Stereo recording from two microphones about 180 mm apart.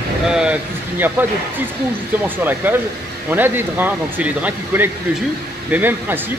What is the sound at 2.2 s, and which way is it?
Speech, 10° right (ahead or behind).